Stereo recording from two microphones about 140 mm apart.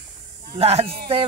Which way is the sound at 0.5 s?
45° right (ahead or behind).